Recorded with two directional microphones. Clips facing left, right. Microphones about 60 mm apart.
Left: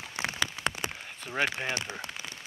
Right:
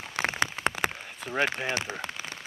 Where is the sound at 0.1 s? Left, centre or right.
Right.